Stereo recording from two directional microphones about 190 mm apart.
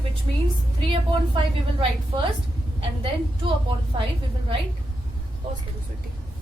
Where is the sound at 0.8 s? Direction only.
25° right (ahead or behind).